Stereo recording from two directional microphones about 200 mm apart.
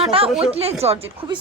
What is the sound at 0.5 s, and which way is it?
Speech, 30° right (ahead or behind).